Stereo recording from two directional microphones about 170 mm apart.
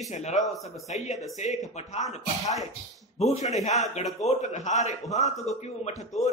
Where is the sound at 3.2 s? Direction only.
40° left (ahead or behind).